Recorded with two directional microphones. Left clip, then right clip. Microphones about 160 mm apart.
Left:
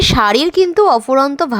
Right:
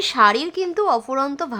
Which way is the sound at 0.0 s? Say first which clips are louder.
Left 4 dB; 45° left (ahead or behind).